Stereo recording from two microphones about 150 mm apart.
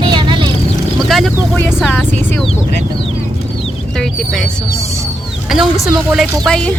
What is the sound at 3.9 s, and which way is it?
Speech, 5° left (ahead or behind).